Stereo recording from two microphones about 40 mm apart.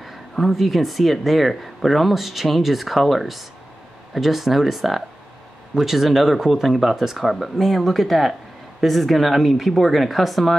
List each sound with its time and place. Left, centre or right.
0.0 s speech: centre